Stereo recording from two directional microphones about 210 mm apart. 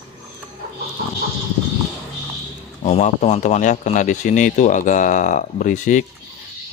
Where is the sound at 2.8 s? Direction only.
35° left (ahead or behind).